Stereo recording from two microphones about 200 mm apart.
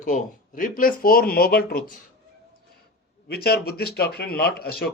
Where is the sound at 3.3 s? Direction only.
50° left (ahead or behind).